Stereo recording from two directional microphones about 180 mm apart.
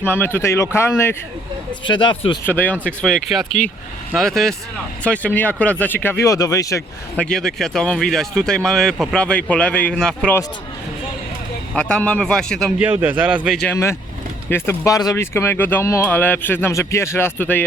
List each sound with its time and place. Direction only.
0.0 s speech: 10° left (ahead or behind)
1.8 s speech: 25° left (ahead or behind)
2.4 s speech: 10° left (ahead or behind)
7.2 s speech: 5° left (ahead or behind)
11.7 s speech: 5° left (ahead or behind)
12.8 s a man's voice: 10° right (ahead or behind)
13.6 s speech: 10° left (ahead or behind)